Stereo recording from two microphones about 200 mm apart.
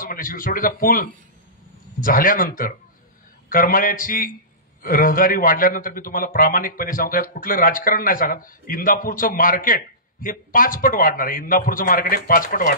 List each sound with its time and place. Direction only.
0.0 s a man's voice: 45° left (ahead or behind)